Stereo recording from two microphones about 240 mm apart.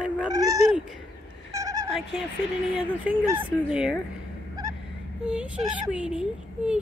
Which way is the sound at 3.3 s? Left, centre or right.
Centre.